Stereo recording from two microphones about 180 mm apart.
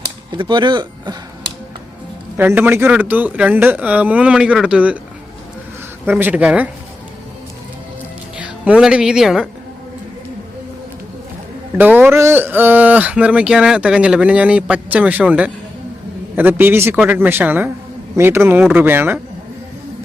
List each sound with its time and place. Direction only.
0.3 s speech: 25° right (ahead or behind)
2.4 s speech: 10° right (ahead or behind)
6.1 s speech: 10° right (ahead or behind)
8.4 s speech: 5° right (ahead or behind)
11.8 s speech: 10° right (ahead or behind)